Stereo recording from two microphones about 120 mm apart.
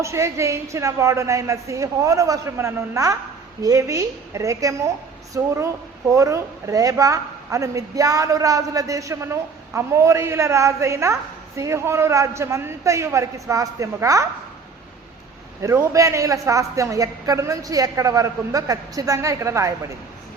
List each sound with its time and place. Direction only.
0.0 s a woman's voice: 25° right (ahead or behind)
15.6 s a woman's voice: 25° right (ahead or behind)